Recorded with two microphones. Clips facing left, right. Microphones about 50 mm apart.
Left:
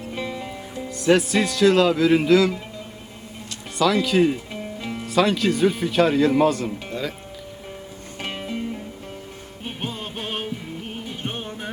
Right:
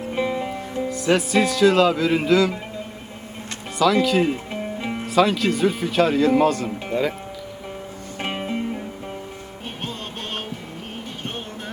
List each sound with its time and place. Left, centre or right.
0.1 s music: right
0.9 s speech: centre
3.8 s speech: centre
4.5 s music: right
5.0 s speech: centre
8.2 s music: right
9.6 s music: centre